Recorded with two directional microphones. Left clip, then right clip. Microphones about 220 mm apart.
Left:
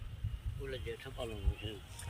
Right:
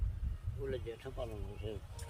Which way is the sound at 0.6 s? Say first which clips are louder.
Right 2 dB; 40° right (ahead or behind).